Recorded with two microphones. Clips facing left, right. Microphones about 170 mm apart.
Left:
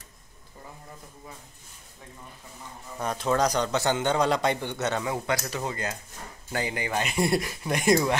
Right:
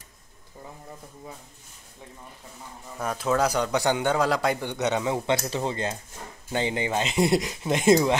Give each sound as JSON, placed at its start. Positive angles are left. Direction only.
{"t": 3.0, "sound": "a man's voice", "side_deg": -5}
{"t": 4.6, "sound": "speech", "side_deg": -15}